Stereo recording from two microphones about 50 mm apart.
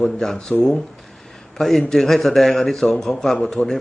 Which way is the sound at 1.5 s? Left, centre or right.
Centre.